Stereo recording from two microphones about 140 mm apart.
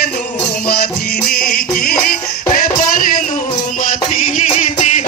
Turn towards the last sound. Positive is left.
turn(degrees=50)  # may be behind; listen again after turning